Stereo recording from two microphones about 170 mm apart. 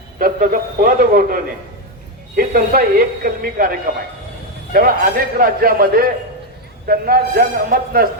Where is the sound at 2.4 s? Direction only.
60° right (ahead or behind).